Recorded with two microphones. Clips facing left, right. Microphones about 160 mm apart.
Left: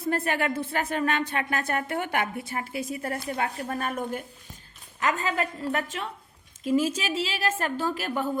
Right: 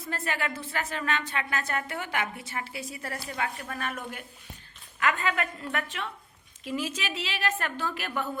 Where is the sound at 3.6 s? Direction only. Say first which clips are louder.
Left 6 dB; 35° left (ahead or behind).